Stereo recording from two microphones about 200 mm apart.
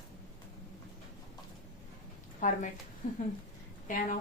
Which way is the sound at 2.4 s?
40° left (ahead or behind).